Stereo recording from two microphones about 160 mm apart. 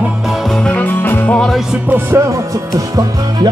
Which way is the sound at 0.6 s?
10° left (ahead or behind).